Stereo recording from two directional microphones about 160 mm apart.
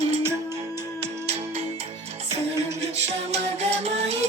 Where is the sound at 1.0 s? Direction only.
40° right (ahead or behind).